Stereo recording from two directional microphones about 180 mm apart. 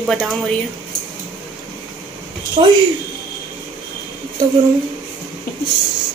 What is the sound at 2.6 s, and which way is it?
Speech, 30° right (ahead or behind).